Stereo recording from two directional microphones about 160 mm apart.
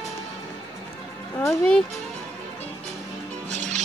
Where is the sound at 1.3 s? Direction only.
15° left (ahead or behind).